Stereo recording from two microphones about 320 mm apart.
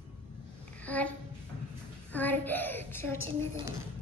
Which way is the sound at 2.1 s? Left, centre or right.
Centre.